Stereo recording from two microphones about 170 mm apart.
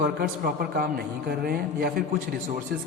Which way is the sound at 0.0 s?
65° right (ahead or behind).